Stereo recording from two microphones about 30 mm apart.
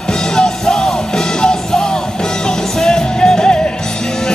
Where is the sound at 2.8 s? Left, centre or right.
Left.